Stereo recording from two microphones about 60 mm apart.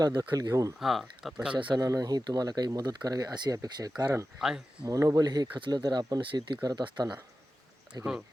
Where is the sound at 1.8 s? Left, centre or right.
Right.